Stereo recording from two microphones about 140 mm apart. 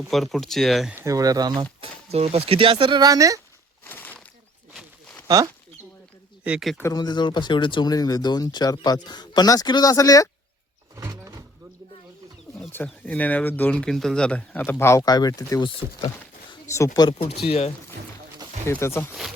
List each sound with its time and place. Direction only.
0.1 s speech: centre (ahead or behind)
0.9 s speech: 25° right (ahead or behind)
1.8 s speech: 45° right (ahead or behind); by 3.4 s 25° right (ahead or behind)
3.8 s a sound: 15° left (ahead or behind)
6.4 s speech: 5° right (ahead or behind)
6.9 s speech: 30° left (ahead or behind)
10.9 s power windows: 20° right (ahead or behind)
12.7 s speech: 15° left (ahead or behind)
17.1 s speech: 40° left (ahead or behind)
18.7 s speech: 15° left (ahead or behind)